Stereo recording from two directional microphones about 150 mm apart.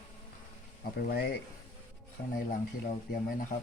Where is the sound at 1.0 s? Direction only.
90° left.